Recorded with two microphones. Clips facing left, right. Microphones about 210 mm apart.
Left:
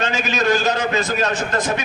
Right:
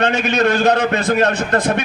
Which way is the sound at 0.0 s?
60° right (ahead or behind).